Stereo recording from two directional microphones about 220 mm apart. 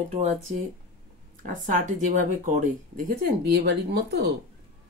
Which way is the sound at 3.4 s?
50° right (ahead or behind).